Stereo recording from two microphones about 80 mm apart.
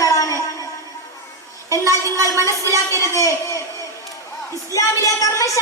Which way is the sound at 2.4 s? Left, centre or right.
Left.